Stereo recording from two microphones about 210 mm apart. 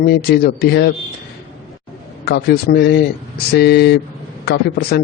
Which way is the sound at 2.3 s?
45° left (ahead or behind).